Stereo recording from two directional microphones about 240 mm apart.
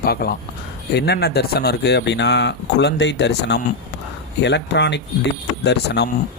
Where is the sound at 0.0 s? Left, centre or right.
Left.